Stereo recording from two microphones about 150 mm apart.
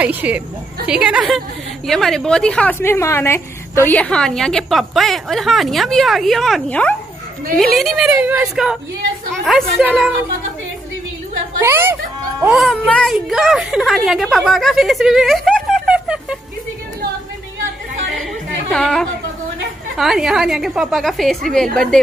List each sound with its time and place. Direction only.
0.0 s a woman's voice: 10° right (ahead or behind)
8.1 s a woman's voice: 10° right (ahead or behind); by 10.1 s 5° left (ahead or behind)
11.6 s a child's voice: 15° right (ahead or behind)
12.5 s speech: 5° left (ahead or behind)
18.7 s a woman's voice: 5° left (ahead or behind)